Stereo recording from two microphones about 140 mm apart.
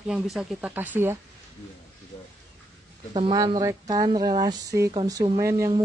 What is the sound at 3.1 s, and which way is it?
Speech, 35° right (ahead or behind).